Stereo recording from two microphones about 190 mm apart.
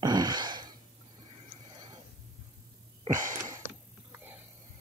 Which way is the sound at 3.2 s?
15° right (ahead or behind).